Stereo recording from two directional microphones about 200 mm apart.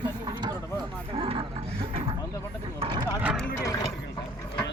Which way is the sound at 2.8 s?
25° right (ahead or behind).